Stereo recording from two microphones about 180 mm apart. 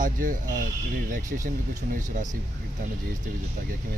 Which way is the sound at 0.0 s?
50° right (ahead or behind).